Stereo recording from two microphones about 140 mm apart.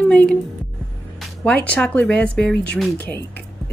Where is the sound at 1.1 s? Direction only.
10° left (ahead or behind).